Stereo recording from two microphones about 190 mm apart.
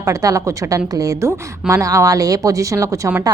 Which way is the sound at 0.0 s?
15° right (ahead or behind).